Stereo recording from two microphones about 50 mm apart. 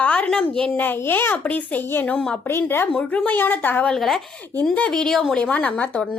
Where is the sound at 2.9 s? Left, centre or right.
Left.